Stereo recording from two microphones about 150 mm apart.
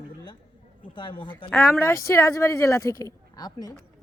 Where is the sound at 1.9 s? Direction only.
20° left (ahead or behind).